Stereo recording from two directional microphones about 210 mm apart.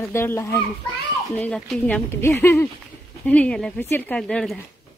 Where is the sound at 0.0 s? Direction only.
10° left (ahead or behind).